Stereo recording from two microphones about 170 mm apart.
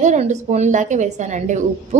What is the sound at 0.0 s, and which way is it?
A woman's voice, 45° right (ahead or behind).